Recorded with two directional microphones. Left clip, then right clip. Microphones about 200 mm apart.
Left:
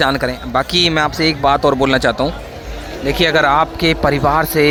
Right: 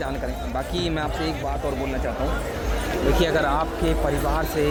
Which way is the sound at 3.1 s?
15° left (ahead or behind).